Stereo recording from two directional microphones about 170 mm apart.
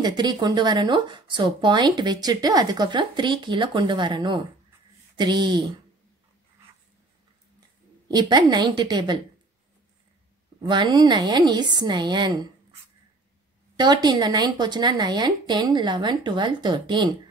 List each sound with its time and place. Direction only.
0.0 s speech: 25° right (ahead or behind)
8.1 s speech: 25° right (ahead or behind)
10.6 s speech: 25° right (ahead or behind)
13.7 s speech: 25° right (ahead or behind)